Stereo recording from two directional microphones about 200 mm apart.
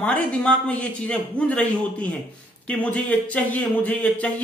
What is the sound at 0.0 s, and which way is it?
Speech, 5° left (ahead or behind).